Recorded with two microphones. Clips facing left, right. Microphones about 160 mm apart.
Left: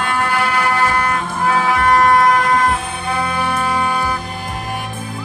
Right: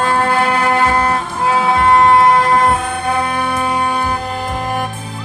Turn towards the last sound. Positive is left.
turn(degrees=-20)  # may be behind; listen again after turning